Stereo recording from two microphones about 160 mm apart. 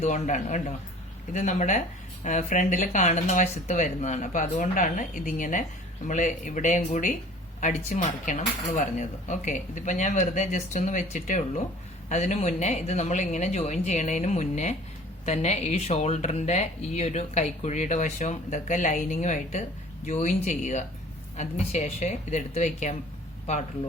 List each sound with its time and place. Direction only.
0.0 s speech: 50° left (ahead or behind)